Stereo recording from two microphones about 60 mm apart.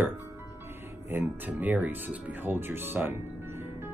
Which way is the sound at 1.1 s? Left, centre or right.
Right.